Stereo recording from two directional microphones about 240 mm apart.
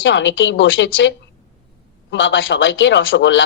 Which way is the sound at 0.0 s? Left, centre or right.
Left.